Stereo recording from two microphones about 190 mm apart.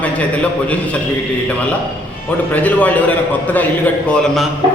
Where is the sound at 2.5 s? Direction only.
10° left (ahead or behind).